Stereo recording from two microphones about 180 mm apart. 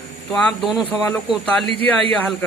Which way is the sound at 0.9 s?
10° left (ahead or behind).